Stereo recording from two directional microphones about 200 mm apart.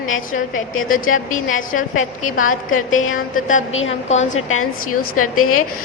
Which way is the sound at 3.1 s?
40° left (ahead or behind).